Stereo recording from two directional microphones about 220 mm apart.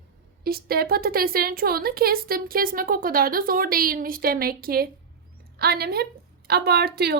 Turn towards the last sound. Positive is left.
turn(degrees=-45)  # may be behind; listen again after turning